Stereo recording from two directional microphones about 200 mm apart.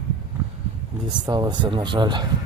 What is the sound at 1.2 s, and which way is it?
Speech, 20° right (ahead or behind).